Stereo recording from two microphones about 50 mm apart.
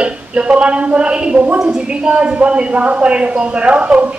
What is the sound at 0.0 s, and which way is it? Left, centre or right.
A woman's voice, right.